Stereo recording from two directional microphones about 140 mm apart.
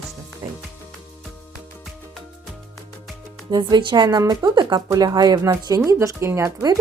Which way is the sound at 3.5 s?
30° right (ahead or behind).